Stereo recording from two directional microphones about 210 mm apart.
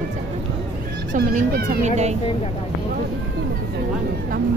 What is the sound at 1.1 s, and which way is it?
Speech, 40° right (ahead or behind).